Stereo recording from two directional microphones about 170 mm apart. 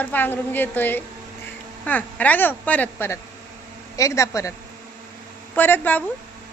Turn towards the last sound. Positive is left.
turn(degrees=10)  # may be behind; listen again after turning